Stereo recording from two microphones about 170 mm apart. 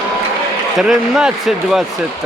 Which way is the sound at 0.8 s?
5° right (ahead or behind).